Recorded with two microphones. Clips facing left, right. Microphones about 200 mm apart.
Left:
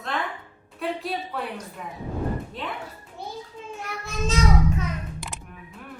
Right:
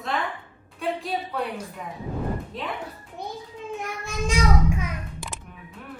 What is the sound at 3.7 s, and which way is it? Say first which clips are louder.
Child singing: right 1 dB; 15° right (ahead or behind).